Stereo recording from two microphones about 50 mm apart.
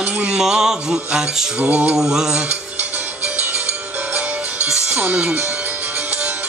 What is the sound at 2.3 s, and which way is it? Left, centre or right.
Music, right.